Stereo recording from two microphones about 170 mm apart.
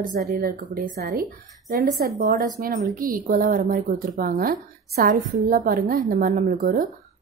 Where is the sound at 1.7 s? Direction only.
65° right (ahead or behind).